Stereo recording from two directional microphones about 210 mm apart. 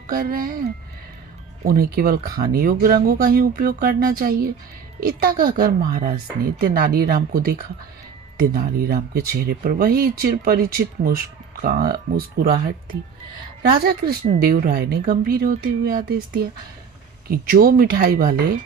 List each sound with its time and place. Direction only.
0.1 s speech: 45° right (ahead or behind)
1.6 s speech: 45° right (ahead or behind)